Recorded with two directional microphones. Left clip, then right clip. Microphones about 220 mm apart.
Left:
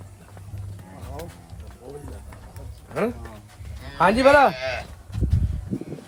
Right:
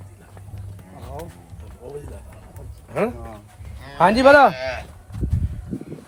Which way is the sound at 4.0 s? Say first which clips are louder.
Right 3 dB; 35° right (ahead or behind).